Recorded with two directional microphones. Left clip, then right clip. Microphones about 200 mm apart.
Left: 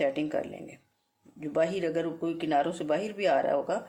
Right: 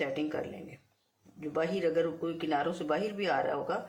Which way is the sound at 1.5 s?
55° left (ahead or behind).